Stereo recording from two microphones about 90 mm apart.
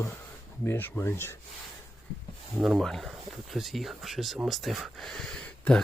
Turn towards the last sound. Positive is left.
turn(degrees=5)  # may be behind; listen again after turning